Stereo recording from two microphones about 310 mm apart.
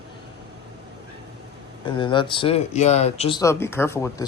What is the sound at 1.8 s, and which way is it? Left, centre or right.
Speech, centre.